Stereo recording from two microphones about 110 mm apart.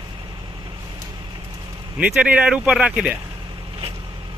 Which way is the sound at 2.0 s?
10° right (ahead or behind).